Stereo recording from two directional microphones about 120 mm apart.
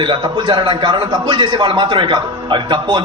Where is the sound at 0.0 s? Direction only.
40° right (ahead or behind).